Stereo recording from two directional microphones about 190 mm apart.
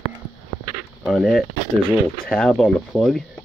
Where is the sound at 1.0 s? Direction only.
Centre (ahead or behind).